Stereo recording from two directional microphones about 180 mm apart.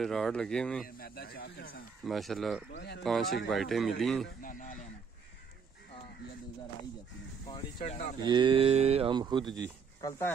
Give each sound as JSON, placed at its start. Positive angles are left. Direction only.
{"t": 0.0, "sound": "a man's voice", "side_deg": 0}
{"t": 0.9, "sound": "speech", "side_deg": 55}
{"t": 2.0, "sound": "a man's voice", "side_deg": 0}
{"t": 2.7, "sound": "speech", "side_deg": 65}
{"t": 3.0, "sound": "a man's voice", "side_deg": 0}
{"t": 4.4, "sound": "speech", "side_deg": 45}
{"t": 7.4, "sound": "speech", "side_deg": 30}
{"t": 8.3, "sound": "speech", "side_deg": -25}
{"t": 10.0, "sound": "speech", "side_deg": 15}